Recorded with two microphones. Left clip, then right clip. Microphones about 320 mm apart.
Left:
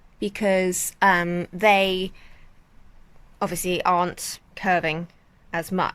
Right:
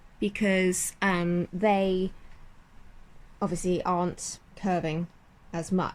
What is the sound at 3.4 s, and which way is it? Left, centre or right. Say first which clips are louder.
Speech: left 6 dB; left.